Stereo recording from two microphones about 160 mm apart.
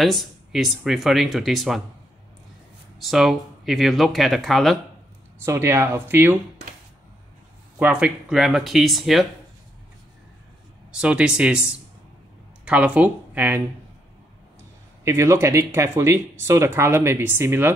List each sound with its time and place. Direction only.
0.0 s speech: centre (ahead or behind)
3.0 s speech: centre (ahead or behind)
5.4 s speech: 15° right (ahead or behind)
7.8 s speech: 5° right (ahead or behind)
10.9 s speech: 5° right (ahead or behind)
15.0 s speech: 20° right (ahead or behind)